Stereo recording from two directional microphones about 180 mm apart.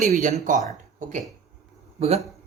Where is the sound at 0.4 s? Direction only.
45° right (ahead or behind).